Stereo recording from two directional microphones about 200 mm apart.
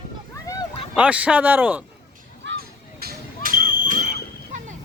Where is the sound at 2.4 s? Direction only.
50° right (ahead or behind).